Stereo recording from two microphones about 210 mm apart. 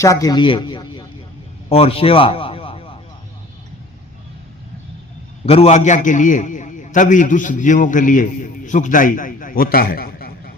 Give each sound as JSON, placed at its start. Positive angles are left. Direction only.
{"t": 0.0, "sound": "a man's voice", "side_deg": 15}
{"t": 5.5, "sound": "a man's voice", "side_deg": 30}